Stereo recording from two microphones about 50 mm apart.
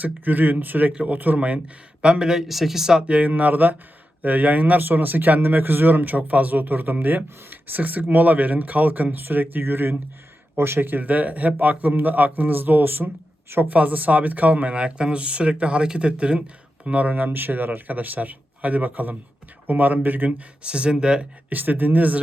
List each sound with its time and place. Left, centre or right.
0.0 s speech: right
1.4 s speech: right
2.5 s speech: centre
3.1 s speech: right
13.7 s speech: right
20.6 s speech: right
21.5 s speech: right